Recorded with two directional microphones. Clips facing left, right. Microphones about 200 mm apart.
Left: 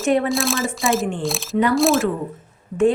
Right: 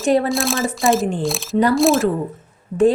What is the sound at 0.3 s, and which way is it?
Speech, centre (ahead or behind).